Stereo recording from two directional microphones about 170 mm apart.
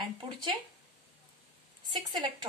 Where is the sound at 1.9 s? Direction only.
25° right (ahead or behind).